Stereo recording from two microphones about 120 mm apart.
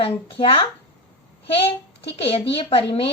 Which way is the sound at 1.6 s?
50° left (ahead or behind).